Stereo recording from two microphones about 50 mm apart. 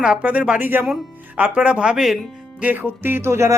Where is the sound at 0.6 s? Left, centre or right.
Right.